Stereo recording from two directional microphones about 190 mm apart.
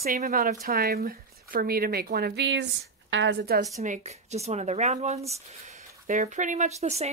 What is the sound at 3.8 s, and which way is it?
Speech, 40° right (ahead or behind).